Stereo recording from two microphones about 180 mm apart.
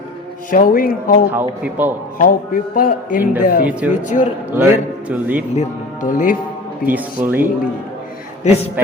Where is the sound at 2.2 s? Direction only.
50° left (ahead or behind).